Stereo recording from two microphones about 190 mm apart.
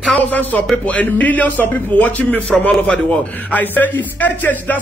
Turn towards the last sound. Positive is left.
turn(degrees=10)  # may be behind; listen again after turning